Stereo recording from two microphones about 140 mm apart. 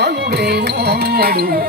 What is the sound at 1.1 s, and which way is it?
Music, 90° right.